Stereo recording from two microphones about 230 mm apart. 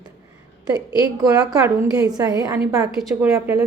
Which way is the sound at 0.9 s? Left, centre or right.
Centre.